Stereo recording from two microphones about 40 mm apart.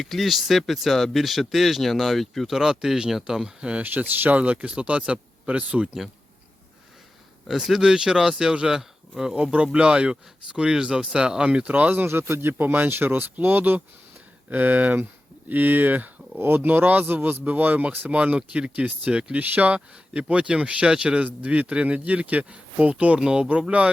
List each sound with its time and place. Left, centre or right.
0.0 s speech: centre
2.5 s speech: centre
3.8 s speech: right
4.4 s speech: right
7.4 s speech: centre
8.8 s a sound: centre
9.3 s speech: right
11.7 s speech: right
12.0 s speech: right
18.3 s speech: right
19.7 s speech: right
21.2 s speech: right
23.2 s speech: right